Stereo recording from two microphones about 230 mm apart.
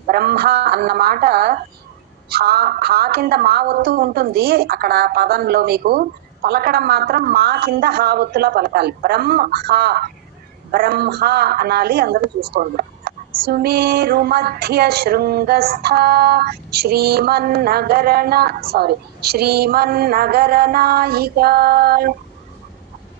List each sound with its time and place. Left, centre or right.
0.0 s speech: right